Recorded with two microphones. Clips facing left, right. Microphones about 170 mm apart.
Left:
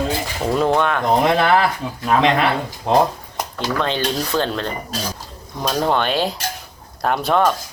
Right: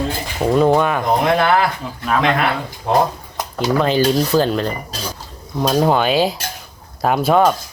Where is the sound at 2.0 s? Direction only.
30° left (ahead or behind).